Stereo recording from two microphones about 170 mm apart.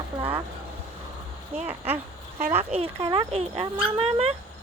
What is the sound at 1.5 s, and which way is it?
Speech, 35° right (ahead or behind).